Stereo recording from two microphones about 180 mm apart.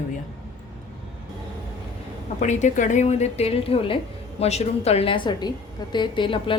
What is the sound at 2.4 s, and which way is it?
A woman's voice, 40° left (ahead or behind).